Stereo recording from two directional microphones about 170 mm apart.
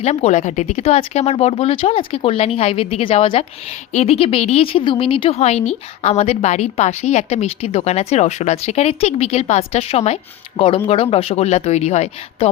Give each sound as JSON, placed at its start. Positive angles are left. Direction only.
{"t": 0.0, "sound": "a woman's voice", "side_deg": 40}